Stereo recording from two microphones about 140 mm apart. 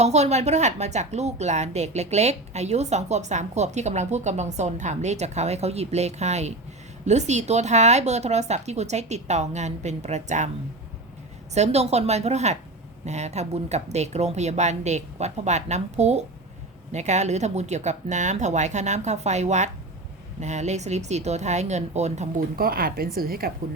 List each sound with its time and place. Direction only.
0.0 s a woman's voice: 50° right (ahead or behind)
11.5 s a woman's voice: 50° right (ahead or behind)
22.4 s speech: 90° right